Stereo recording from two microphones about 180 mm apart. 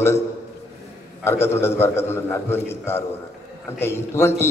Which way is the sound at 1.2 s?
15° left (ahead or behind).